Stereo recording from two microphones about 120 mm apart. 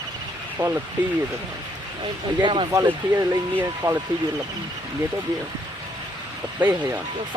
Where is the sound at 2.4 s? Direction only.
45° right (ahead or behind).